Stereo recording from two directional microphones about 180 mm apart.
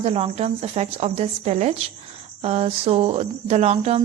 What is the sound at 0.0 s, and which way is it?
Speech, 35° right (ahead or behind).